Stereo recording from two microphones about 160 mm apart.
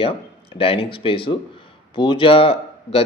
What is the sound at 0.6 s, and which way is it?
A man's voice, 35° left (ahead or behind).